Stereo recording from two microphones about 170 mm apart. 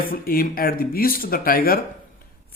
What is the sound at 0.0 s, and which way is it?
Speech, 60° left (ahead or behind).